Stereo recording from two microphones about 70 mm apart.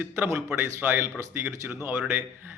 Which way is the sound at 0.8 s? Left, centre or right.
Right.